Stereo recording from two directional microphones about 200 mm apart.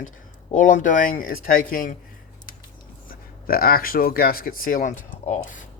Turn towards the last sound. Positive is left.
turn(degrees=40)  # may be behind; listen again after turning